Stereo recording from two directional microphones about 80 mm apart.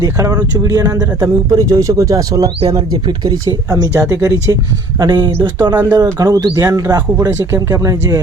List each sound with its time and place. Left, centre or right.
0.0 s speech: right
3.9 s speech: right
4.9 s speech: right
7.2 s speech: right